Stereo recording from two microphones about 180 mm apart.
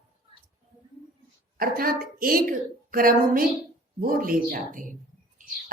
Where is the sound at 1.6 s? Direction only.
55° right (ahead or behind).